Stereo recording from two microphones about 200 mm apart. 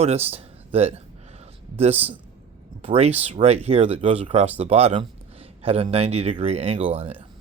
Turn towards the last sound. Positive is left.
turn(degrees=-30)  # may be behind; listen again after turning